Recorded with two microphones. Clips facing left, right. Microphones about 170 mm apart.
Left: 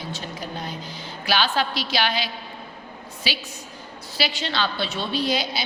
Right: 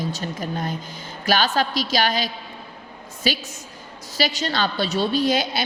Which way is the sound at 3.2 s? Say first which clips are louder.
Right 6 dB; 45° right (ahead or behind).